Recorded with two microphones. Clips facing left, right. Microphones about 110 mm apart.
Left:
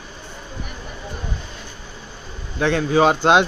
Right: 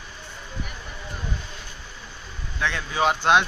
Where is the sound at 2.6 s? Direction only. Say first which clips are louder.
Left 10 dB; 45° left (ahead or behind).